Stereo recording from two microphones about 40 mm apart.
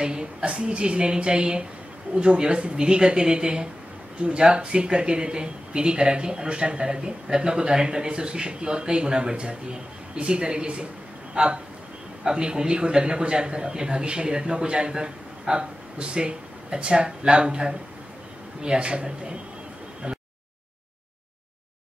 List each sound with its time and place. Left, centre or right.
0.0 s speech: right